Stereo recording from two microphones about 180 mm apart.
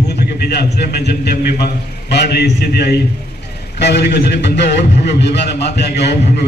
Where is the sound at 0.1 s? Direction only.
65° left (ahead or behind).